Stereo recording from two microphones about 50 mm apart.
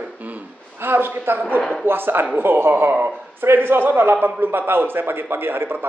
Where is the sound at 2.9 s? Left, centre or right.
Right.